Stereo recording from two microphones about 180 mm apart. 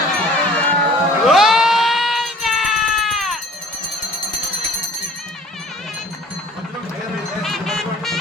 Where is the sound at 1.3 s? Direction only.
Centre (ahead or behind).